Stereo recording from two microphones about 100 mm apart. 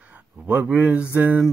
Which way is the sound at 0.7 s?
15° right (ahead or behind).